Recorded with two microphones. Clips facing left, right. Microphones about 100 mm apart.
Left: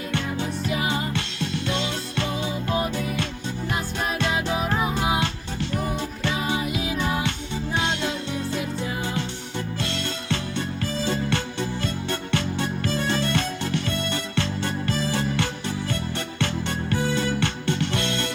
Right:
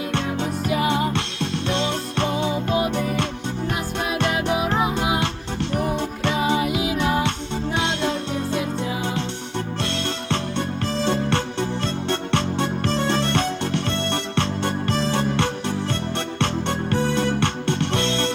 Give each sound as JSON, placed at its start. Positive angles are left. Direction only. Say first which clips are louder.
{"t": 0.1, "sound": "music", "louder": "even", "side_deg": -65}
{"t": 10.2, "sound": "music", "louder": "right 3 dB", "side_deg": -65}